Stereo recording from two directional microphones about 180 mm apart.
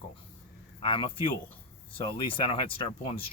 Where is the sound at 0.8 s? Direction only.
30° left (ahead or behind).